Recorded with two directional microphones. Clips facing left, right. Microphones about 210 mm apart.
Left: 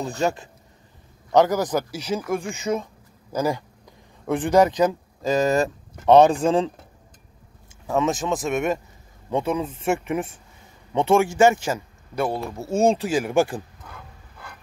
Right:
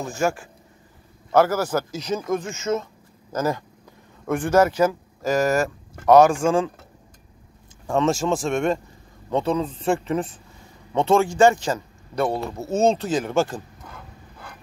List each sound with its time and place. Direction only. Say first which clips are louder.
0.0 s speech: even; 20° left (ahead or behind)
7.8 s speech: right 2 dB; centre (ahead or behind)